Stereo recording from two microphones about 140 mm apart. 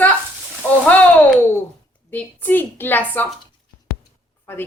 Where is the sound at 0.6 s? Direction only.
15° left (ahead or behind).